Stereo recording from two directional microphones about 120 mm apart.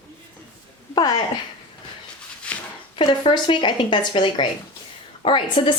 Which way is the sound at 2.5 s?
10° left (ahead or behind).